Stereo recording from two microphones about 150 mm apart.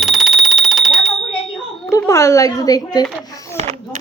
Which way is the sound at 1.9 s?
20° left (ahead or behind).